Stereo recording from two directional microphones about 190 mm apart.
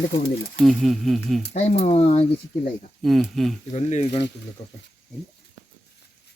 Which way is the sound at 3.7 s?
35° left (ahead or behind).